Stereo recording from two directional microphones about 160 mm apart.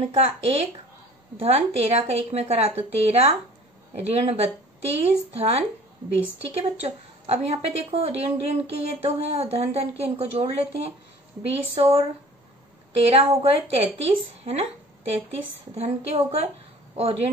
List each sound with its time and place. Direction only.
0.1 s a woman's voice: 40° right (ahead or behind)